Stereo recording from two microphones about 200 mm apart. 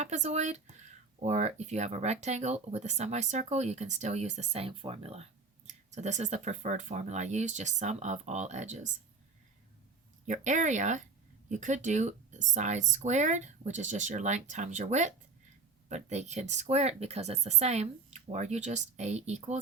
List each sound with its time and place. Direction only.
0.0 s speech: 35° right (ahead or behind)
10.2 s speech: 35° right (ahead or behind)